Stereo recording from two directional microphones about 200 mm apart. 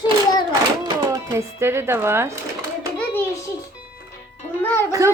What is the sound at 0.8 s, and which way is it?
A woman's voice, 15° right (ahead or behind).